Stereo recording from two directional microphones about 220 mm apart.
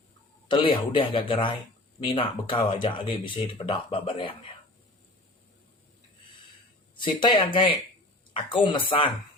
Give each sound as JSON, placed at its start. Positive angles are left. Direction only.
{"t": 0.4, "sound": "speech", "side_deg": 20}
{"t": 6.9, "sound": "speech", "side_deg": 20}